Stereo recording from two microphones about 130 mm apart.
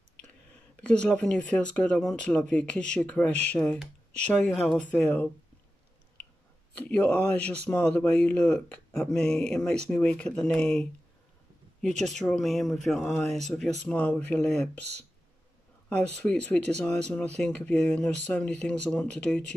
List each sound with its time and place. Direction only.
0.5 s speech: 10° left (ahead or behind)
7.0 s speech: 10° left (ahead or behind)
12.0 s speech: 5° left (ahead or behind)
16.0 s speech: 10° left (ahead or behind)